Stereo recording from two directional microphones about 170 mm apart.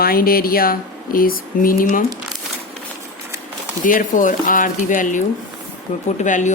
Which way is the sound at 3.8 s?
50° left (ahead or behind).